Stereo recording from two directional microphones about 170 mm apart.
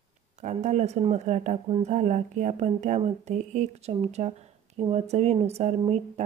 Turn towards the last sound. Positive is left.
turn(degrees=-40)  # may be behind; listen again after turning